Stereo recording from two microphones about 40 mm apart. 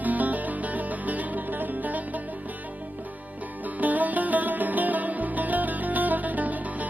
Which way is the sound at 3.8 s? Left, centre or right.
Right.